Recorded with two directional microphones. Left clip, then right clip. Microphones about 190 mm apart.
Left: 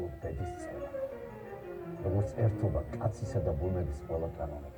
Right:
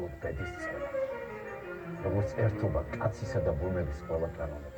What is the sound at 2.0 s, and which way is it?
Speech, 15° right (ahead or behind).